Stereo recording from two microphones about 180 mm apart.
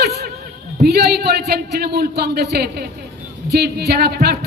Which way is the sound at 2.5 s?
65° right (ahead or behind).